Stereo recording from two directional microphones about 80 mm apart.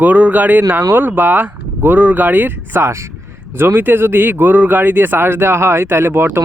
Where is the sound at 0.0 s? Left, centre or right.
Centre.